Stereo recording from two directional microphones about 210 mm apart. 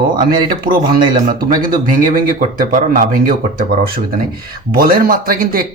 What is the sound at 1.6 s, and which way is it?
Speech, 40° right (ahead or behind).